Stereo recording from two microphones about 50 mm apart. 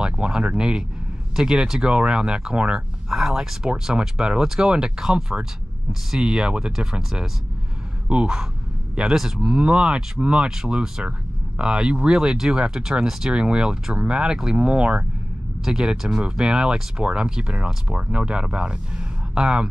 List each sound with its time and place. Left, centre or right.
0.0 s speech: centre